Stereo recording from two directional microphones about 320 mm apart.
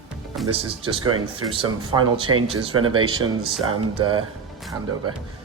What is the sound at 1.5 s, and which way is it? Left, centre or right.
Speech, centre.